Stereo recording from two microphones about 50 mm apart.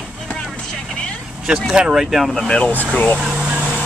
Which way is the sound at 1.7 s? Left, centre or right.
Centre.